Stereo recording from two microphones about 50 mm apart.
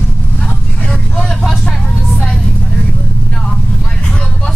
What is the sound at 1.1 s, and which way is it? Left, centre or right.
Vehicle, left.